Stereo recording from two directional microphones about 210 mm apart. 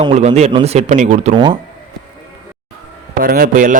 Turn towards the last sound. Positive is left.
turn(degrees=-40)  # may be behind; listen again after turning